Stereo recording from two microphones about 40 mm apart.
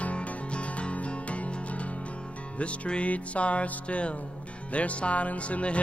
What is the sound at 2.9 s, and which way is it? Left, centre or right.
Music, left.